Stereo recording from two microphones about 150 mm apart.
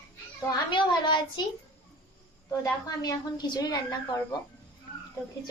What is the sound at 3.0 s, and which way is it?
A woman's voice, 25° left (ahead or behind).